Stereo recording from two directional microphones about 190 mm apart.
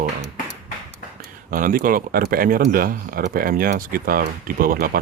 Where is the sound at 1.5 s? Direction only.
50° right (ahead or behind).